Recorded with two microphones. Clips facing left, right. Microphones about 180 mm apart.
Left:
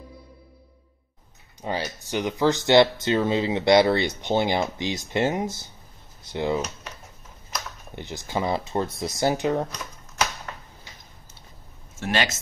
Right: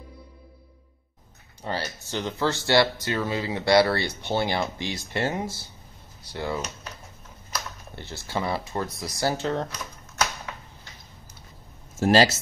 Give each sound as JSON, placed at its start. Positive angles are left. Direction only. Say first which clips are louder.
{"t": 1.6, "sound": "speech", "louder": "left 2 dB", "side_deg": 15}
{"t": 7.9, "sound": "speech", "louder": "left 2 dB", "side_deg": 15}
{"t": 9.7, "sound": "typewriter", "louder": "even", "side_deg": -5}
{"t": 12.0, "sound": "speech", "louder": "right 7 dB", "side_deg": -35}